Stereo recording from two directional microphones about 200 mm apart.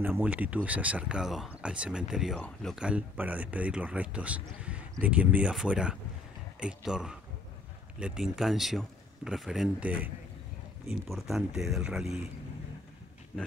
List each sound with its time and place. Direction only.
0.0 s speech: 10° right (ahead or behind)